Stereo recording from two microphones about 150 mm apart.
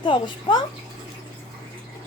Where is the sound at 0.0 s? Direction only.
30° left (ahead or behind).